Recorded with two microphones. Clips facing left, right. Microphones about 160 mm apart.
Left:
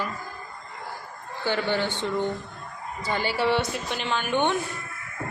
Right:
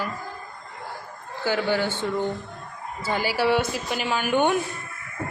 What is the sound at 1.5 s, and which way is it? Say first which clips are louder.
Speech: right 2 dB; 10° right (ahead or behind).